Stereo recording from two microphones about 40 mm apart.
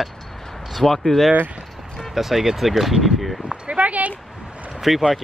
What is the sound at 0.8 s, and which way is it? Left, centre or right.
Speech, centre.